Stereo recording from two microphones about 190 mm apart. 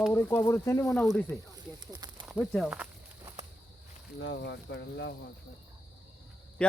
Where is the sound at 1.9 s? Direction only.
25° right (ahead or behind).